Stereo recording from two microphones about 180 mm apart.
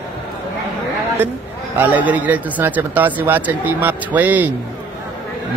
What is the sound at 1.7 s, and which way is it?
A man's voice, 10° right (ahead or behind).